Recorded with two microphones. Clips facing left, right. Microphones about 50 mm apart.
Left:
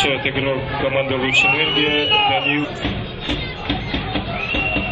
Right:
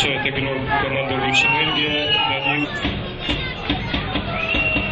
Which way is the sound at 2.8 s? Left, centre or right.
Centre.